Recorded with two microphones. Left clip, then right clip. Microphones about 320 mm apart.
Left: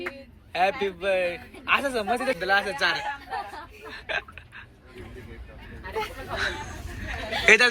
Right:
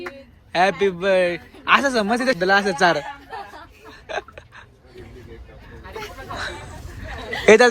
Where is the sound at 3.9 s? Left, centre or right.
Centre.